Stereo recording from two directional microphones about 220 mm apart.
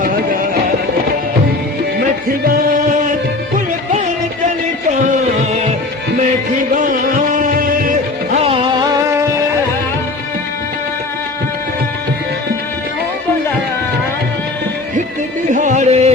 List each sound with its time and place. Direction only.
7.3 s music: 40° right (ahead or behind)
8.4 s music: 25° right (ahead or behind)
15.4 s music: 35° right (ahead or behind)